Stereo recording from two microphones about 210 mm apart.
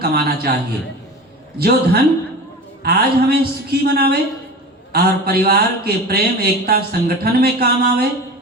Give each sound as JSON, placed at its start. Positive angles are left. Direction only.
{"t": 0.0, "sound": "speech", "side_deg": -50}
{"t": 1.5, "sound": "speech", "side_deg": -50}